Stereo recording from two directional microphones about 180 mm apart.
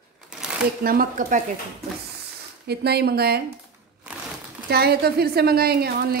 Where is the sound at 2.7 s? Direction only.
65° right (ahead or behind).